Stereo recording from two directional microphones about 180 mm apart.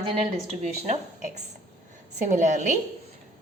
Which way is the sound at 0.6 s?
40° right (ahead or behind).